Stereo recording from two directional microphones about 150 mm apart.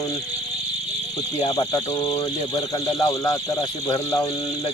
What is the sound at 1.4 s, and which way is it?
Speech, 30° left (ahead or behind).